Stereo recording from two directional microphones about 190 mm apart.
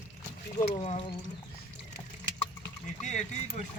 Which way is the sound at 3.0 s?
40° left (ahead or behind).